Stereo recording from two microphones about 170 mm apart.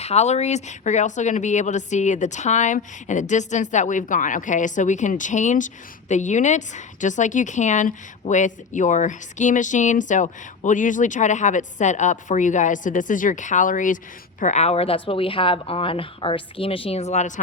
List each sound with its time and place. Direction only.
0.0 s speech: 40° left (ahead or behind)